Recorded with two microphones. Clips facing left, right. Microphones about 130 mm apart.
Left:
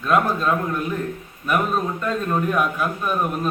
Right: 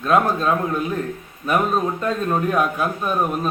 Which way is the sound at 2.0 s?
25° right (ahead or behind).